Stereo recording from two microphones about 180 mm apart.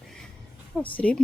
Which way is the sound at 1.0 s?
5° left (ahead or behind).